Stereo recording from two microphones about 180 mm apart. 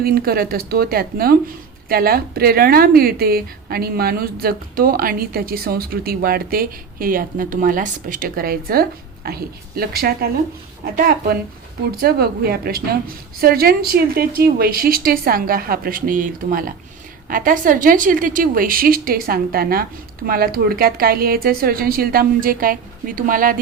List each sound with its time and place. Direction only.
0.0 s speech: 55° right (ahead or behind)
11.9 s a woman's voice: 60° right (ahead or behind)